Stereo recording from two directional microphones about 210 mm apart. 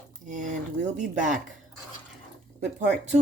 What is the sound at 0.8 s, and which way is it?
Speech, 35° right (ahead or behind).